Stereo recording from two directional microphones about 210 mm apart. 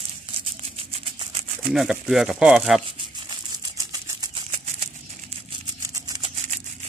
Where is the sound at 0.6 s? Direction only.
25° right (ahead or behind).